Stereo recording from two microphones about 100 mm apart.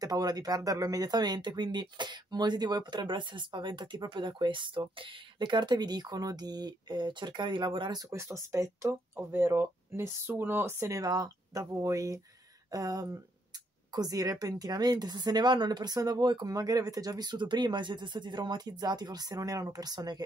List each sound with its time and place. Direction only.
0.0 s speech: 40° right (ahead or behind)
8.0 s speech: 30° right (ahead or behind)
11.0 s speech: 40° right (ahead or behind)